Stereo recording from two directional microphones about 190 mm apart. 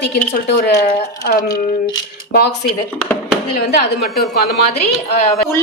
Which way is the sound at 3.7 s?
55° left (ahead or behind).